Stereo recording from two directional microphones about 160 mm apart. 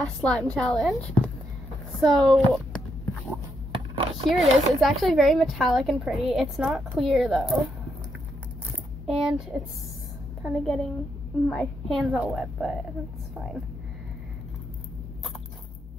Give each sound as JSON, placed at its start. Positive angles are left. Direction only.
{"t": 0.2, "sound": "a woman's voice", "side_deg": 5}
{"t": 3.7, "sound": "a sound", "side_deg": -30}
{"t": 4.3, "sound": "speech", "side_deg": 0}
{"t": 9.0, "sound": "speech", "side_deg": -5}